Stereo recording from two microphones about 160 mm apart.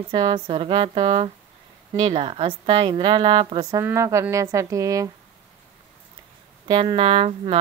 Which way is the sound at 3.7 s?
20° right (ahead or behind).